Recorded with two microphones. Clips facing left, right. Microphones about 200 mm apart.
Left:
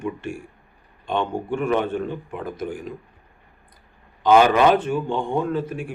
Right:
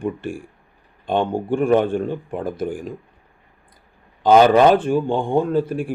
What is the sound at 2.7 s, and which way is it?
Speech, 50° right (ahead or behind).